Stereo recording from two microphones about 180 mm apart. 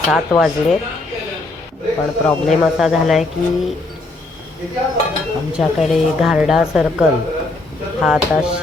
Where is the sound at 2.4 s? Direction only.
Centre (ahead or behind).